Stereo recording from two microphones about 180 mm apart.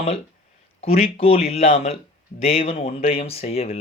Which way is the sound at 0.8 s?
35° left (ahead or behind).